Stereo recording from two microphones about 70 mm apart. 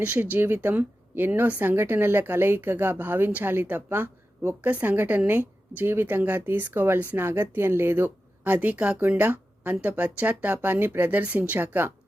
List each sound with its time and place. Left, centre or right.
0.0 s a woman's voice: right